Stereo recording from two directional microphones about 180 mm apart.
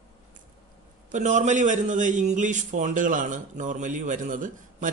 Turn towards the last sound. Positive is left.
turn(degrees=-45)  # may be behind; listen again after turning